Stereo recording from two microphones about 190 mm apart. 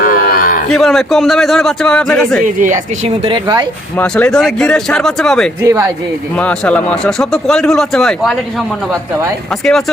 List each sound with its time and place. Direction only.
0.0 s a sound: 45° left (ahead or behind)
0.7 s speech: centre (ahead or behind)
2.4 s speech: 45° right (ahead or behind)
3.2 s speech: 25° right (ahead or behind)
3.9 s speech: 5° left (ahead or behind)
5.6 s speech: 15° right (ahead or behind)
6.3 s speech: 5° left (ahead or behind)